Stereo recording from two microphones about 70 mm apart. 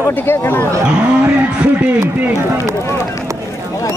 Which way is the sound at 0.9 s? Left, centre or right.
Centre.